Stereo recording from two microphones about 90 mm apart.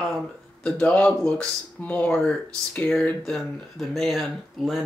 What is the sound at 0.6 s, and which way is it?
Speech, 15° left (ahead or behind).